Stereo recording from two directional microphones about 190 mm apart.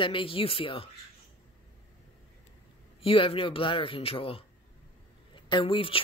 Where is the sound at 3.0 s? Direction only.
30° left (ahead or behind).